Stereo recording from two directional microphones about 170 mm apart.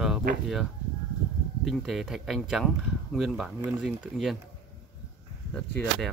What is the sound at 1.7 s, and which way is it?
Speech, centre (ahead or behind).